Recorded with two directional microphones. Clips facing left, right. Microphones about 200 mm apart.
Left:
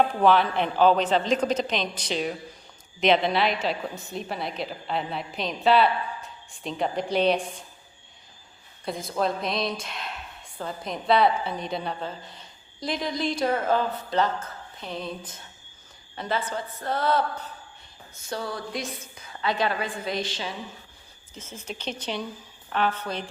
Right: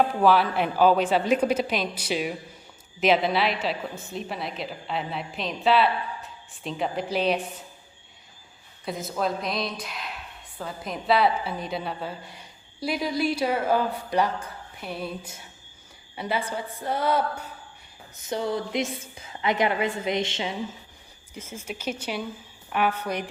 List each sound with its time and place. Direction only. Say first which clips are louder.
0.2 s a woman's voice: even; 5° right (ahead or behind)
8.8 s a woman's voice: left 1 dB; centre (ahead or behind); by 20.5 s 20° right (ahead or behind)
21.3 s a woman's voice: right 2 dB; 10° right (ahead or behind)